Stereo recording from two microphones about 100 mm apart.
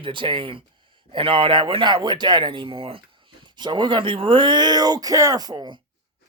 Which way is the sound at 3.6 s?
50° right (ahead or behind).